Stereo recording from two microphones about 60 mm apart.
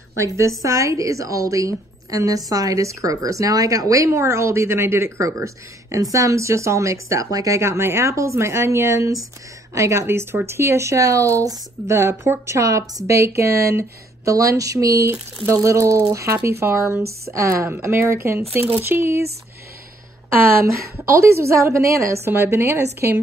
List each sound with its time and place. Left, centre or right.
0.4 s a woman's voice: right
4.2 s speech: right
5.2 s speech: right
7.6 s speech: right
11.9 s speech: right
17.6 s speech: right
21.0 s speech: right
22.3 s speech: right